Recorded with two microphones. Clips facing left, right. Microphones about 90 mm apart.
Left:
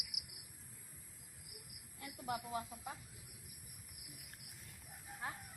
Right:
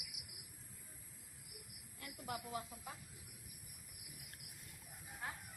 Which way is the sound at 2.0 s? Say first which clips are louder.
Left 4 dB; 25° left (ahead or behind).